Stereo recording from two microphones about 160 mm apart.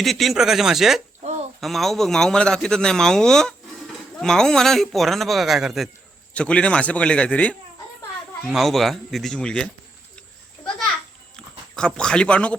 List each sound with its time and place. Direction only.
0.0 s a man's voice: centre (ahead or behind)
1.2 s a sound: 45° right (ahead or behind)
1.6 s a man's voice: centre (ahead or behind)
11.8 s a man's voice: 5° left (ahead or behind)